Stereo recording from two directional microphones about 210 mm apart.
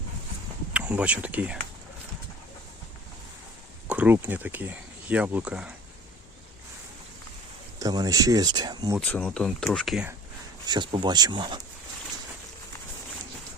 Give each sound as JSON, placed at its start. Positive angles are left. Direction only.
{"t": 0.7, "sound": "speech", "side_deg": -5}
{"t": 3.8, "sound": "speech", "side_deg": -5}
{"t": 7.8, "sound": "speech", "side_deg": -20}
{"t": 9.0, "sound": "speech", "side_deg": 5}
{"t": 10.7, "sound": "speech", "side_deg": -20}